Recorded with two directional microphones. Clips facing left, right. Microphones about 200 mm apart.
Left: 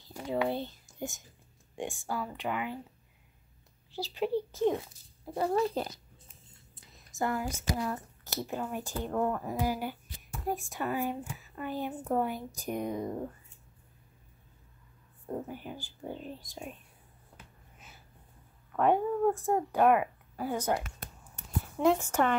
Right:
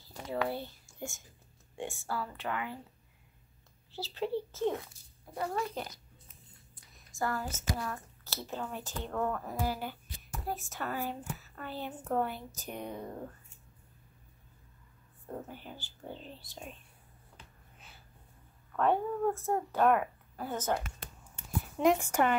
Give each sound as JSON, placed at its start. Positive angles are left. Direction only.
{"t": 0.1, "sound": "a sound", "side_deg": 20}
{"t": 1.8, "sound": "a woman's voice", "side_deg": 15}
{"t": 3.9, "sound": "a woman's voice", "side_deg": 15}
{"t": 5.3, "sound": "speech", "side_deg": 30}
{"t": 6.7, "sound": "a woman's voice", "side_deg": 20}
{"t": 15.4, "sound": "a woman's voice", "side_deg": 10}
{"t": 18.8, "sound": "a woman's voice", "side_deg": 15}
{"t": 21.7, "sound": "a woman's voice", "side_deg": -15}